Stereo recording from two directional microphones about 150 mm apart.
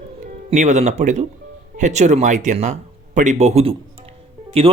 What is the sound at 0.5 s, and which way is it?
Speech, 50° right (ahead or behind).